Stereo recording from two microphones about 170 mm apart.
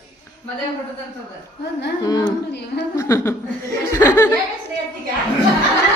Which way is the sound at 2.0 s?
25° left (ahead or behind).